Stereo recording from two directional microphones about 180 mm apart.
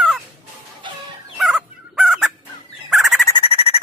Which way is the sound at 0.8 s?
25° right (ahead or behind).